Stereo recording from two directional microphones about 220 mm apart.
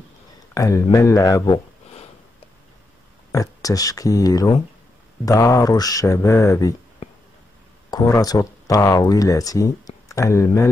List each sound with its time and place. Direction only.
0.6 s speech: 15° left (ahead or behind)
3.3 s speech: 15° left (ahead or behind)
7.9 s speech: 15° left (ahead or behind)